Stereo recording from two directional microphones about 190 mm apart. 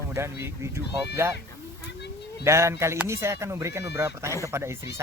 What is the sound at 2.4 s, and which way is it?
Speech, 15° right (ahead or behind).